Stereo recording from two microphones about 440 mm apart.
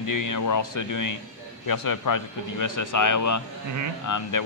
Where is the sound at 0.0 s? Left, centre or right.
Left.